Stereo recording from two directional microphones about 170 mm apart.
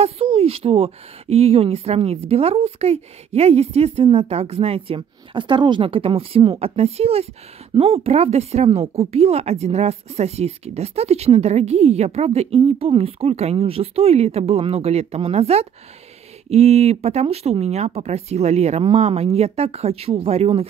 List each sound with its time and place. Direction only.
0.0 s speech: 35° right (ahead or behind)